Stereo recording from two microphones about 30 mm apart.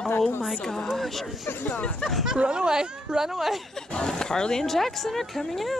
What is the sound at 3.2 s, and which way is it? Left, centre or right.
Speech, centre.